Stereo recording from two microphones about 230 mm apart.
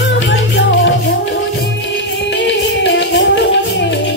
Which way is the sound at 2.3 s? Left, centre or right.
Left.